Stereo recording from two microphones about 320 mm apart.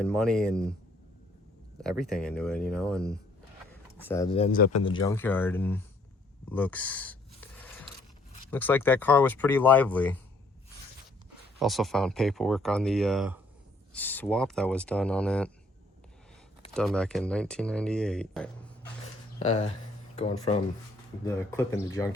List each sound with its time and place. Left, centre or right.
0.0 s speech: centre
1.8 s speech: centre; by 4.7 s left
4.9 s speech: centre
8.4 s speech: centre
11.6 s speech: centre
16.7 s speech: centre
19.0 s a sound: centre
20.1 s speech: centre